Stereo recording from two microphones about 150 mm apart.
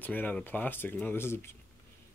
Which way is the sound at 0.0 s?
10° left (ahead or behind).